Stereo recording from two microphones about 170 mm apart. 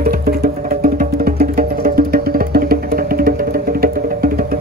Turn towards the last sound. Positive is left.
turn(degrees=-60)  # may be behind; listen again after turning